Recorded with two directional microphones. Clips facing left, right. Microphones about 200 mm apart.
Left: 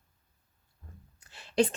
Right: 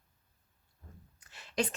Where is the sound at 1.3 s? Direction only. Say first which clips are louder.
Left 7 dB; 30° left (ahead or behind).